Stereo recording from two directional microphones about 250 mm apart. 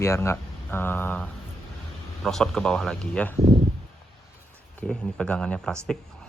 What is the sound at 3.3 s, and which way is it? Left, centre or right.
Speech, right.